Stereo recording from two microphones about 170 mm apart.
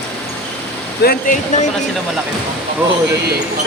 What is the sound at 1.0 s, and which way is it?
Speech, 50° left (ahead or behind).